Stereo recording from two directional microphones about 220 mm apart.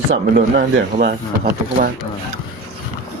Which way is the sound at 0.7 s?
45° right (ahead or behind).